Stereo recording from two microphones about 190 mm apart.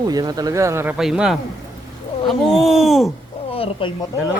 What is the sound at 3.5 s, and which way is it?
Speech, 30° left (ahead or behind).